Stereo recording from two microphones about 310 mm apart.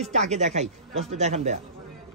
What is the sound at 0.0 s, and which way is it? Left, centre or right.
Speech, right.